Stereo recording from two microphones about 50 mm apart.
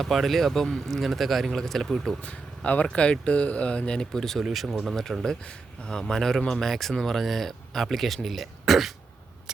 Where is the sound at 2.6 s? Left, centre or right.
Left; by 4.9 s centre.